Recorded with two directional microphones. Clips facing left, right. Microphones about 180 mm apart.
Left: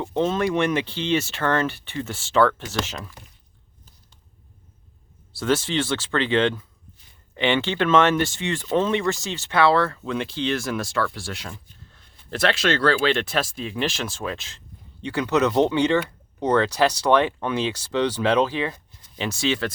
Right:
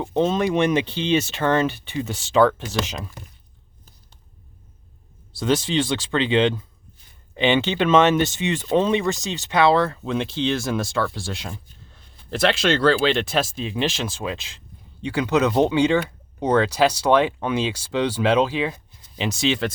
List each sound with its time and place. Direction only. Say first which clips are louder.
0.0 s speech: right 2 dB; 20° right (ahead or behind)
5.3 s speech: right 1 dB; 15° right (ahead or behind)